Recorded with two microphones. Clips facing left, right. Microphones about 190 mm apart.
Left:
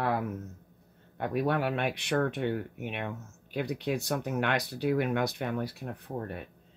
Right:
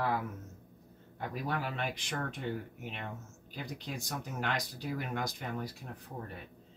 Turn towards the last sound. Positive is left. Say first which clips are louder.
# left 7 dB
turn(degrees=50)  # may be behind; listen again after turning